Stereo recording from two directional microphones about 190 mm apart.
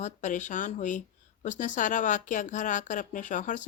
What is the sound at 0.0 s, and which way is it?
Speech, 40° left (ahead or behind).